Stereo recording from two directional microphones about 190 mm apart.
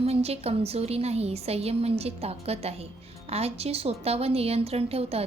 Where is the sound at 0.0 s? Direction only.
30° right (ahead or behind).